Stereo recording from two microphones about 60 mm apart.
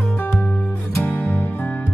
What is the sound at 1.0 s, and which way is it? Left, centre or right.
Music, left.